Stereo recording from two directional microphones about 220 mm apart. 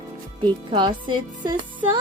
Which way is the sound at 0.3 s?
20° right (ahead or behind).